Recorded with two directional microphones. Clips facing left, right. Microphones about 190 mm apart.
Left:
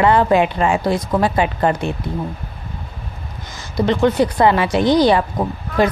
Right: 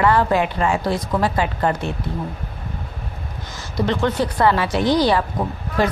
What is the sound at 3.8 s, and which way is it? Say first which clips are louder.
A woman's voice: left 5 dB; 15° left (ahead or behind).